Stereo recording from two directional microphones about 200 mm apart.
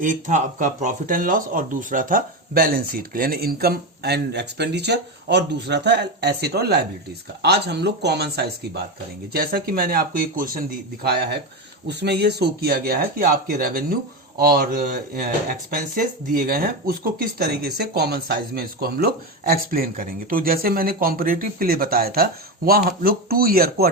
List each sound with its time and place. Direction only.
0.0 s speech: 40° right (ahead or behind)